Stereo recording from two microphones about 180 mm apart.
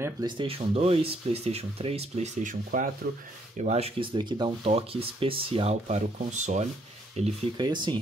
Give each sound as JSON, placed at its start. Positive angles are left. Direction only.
{"t": 0.4, "sound": "speech", "side_deg": -35}
{"t": 3.5, "sound": "speech", "side_deg": -35}
{"t": 7.6, "sound": "speech", "side_deg": -25}